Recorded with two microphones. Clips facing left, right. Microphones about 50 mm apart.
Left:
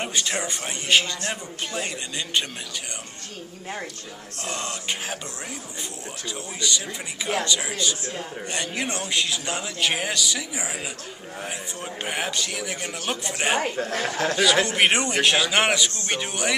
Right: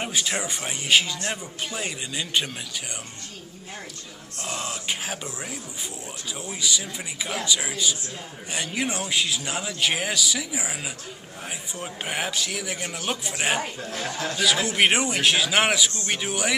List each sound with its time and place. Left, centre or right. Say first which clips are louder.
0.0 s a man's voice: even; centre
4.4 s a man's voice: even; centre
13.7 s speech: left 5 dB; left
14.7 s a man's voice: even; centre